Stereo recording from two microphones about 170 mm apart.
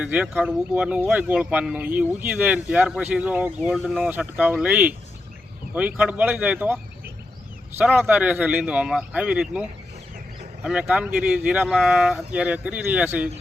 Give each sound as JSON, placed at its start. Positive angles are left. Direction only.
{"t": 0.0, "sound": "speech", "side_deg": -5}
{"t": 3.7, "sound": "speech", "side_deg": 0}
{"t": 4.0, "sound": "speech", "side_deg": -10}